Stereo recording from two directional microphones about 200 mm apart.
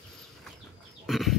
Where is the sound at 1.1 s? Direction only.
Centre (ahead or behind).